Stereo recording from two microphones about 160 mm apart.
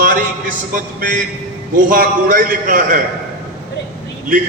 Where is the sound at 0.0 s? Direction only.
55° right (ahead or behind).